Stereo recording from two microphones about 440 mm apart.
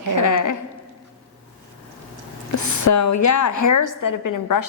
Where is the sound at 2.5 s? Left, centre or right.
Left.